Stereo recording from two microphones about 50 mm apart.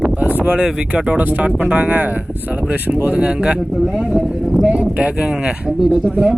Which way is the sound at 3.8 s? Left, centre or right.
Centre.